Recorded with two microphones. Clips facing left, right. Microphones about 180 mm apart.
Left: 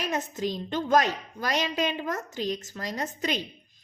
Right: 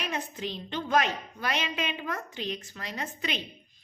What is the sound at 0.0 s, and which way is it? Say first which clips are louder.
A woman's voice: left 5 dB; 40° left (ahead or behind).